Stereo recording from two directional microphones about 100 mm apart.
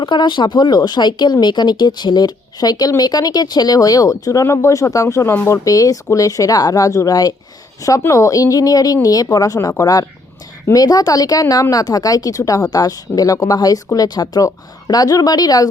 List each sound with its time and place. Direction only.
0.0 s speech: 50° left (ahead or behind); by 5.5 s 25° left (ahead or behind)
5.6 s speech: 35° left (ahead or behind)